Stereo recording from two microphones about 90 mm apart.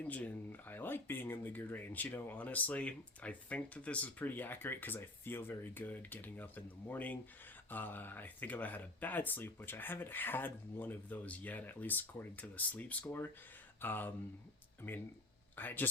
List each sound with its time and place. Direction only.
0.0 s speech: 15° left (ahead or behind)